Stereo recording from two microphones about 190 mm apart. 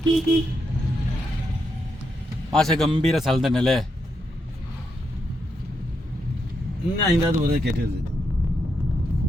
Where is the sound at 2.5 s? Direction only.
5° left (ahead or behind).